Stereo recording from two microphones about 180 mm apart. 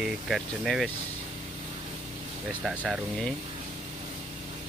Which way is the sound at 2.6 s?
Centre (ahead or behind).